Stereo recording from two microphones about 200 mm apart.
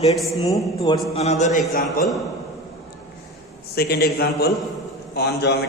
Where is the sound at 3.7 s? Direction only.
50° left (ahead or behind).